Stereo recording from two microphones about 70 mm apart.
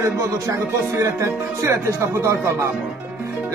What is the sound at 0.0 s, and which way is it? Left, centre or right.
Speech, right.